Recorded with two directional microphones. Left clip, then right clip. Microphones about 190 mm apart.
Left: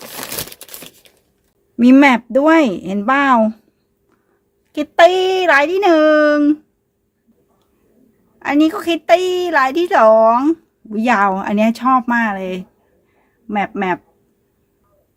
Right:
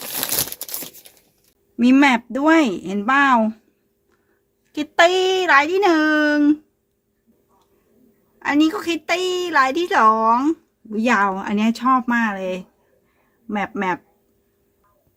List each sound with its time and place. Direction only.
1.7 s a woman's voice: 20° left (ahead or behind)
4.7 s a woman's voice: 15° left (ahead or behind)
8.4 s a woman's voice: 15° left (ahead or behind)